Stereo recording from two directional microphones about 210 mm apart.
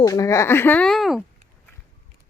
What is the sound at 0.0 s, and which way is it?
Speech, 15° left (ahead or behind).